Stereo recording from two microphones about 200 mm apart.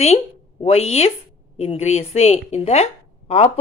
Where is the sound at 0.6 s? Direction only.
30° left (ahead or behind).